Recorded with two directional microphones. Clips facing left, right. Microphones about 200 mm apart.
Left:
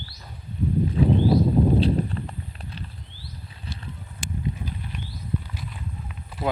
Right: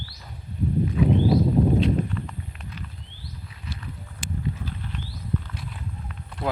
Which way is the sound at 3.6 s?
30° left (ahead or behind).